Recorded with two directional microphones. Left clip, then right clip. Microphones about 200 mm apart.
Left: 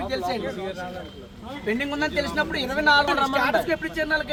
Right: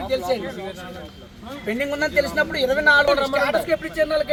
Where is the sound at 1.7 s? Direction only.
35° right (ahead or behind).